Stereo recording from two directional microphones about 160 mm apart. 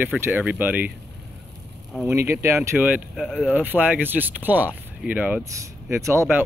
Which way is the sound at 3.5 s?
10° right (ahead or behind).